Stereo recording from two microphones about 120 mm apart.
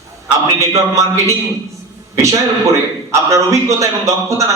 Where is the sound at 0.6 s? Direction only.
25° right (ahead or behind).